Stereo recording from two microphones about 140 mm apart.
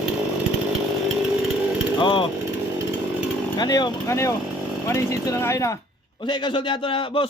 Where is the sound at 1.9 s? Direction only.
35° left (ahead or behind).